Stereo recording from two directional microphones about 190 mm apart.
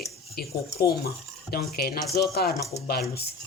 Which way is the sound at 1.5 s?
55° left (ahead or behind).